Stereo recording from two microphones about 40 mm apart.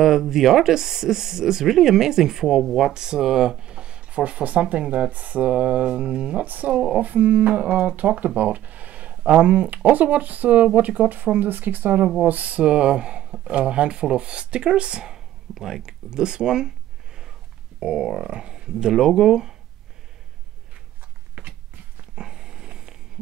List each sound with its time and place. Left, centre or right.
0.0 s speech: centre
2.9 s speech: centre
5.1 s speech: right
6.4 s speech: right
6.7 s speech: right
7.0 s speech: right
8.4 s a sound: right
9.1 s speech: right
15.1 s a sound: centre
17.7 s speech: centre
21.4 s a sound: right
22.1 s a sound: right